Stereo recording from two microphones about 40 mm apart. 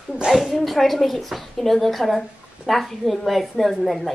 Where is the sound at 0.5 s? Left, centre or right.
Centre.